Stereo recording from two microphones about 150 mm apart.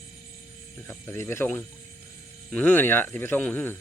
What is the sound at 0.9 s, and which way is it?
Speech, 15° left (ahead or behind).